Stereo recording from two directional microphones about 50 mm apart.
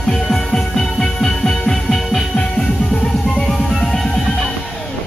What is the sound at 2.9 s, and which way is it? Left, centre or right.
Music, left.